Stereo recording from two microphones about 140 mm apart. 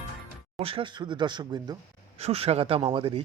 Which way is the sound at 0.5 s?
40° right (ahead or behind).